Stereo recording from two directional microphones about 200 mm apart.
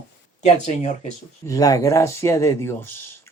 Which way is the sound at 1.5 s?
15° left (ahead or behind).